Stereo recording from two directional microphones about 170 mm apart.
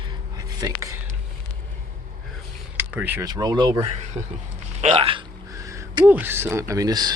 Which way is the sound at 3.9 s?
40° right (ahead or behind).